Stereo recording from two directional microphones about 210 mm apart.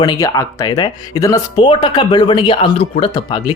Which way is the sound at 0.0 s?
20° left (ahead or behind).